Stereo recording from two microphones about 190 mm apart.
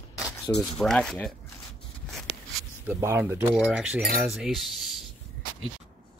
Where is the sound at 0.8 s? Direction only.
5° left (ahead or behind).